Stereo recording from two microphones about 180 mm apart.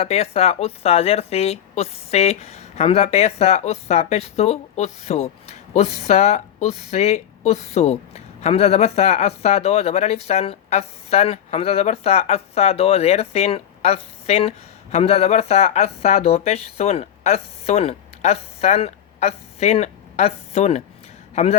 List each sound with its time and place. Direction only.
0.0 s a woman's voice: 35° left (ahead or behind)